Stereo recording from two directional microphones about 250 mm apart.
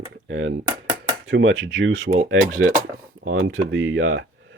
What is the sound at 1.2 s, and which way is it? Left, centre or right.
Speech, right.